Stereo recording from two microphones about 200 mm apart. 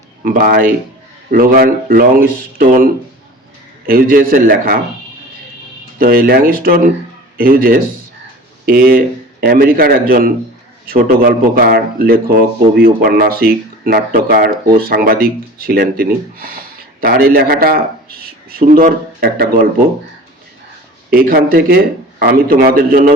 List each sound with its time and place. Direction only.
0.2 s a man's voice: 45° right (ahead or behind)
6.0 s a man's voice: 45° right (ahead or behind)
21.1 s a man's voice: 50° right (ahead or behind)